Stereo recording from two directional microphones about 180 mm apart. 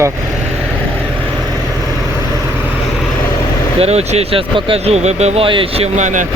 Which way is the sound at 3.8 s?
35° right (ahead or behind).